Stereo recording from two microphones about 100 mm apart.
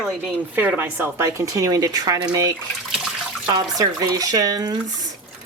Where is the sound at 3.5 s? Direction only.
35° right (ahead or behind).